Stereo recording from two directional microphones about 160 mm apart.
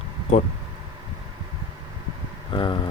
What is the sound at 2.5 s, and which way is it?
Speech, 30° left (ahead or behind).